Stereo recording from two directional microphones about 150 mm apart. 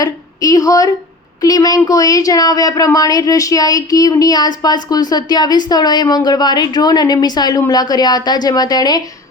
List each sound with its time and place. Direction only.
0.0 s a woman's voice: 25° left (ahead or behind)